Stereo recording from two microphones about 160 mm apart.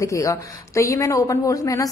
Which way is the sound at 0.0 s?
20° left (ahead or behind).